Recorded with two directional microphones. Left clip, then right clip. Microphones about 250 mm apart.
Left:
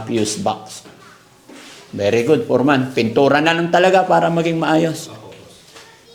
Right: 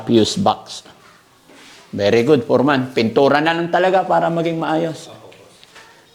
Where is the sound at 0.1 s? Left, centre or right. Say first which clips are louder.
Right 5 dB; right.